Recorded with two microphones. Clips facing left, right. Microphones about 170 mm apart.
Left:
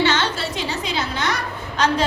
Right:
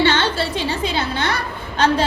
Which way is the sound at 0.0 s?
30° right (ahead or behind).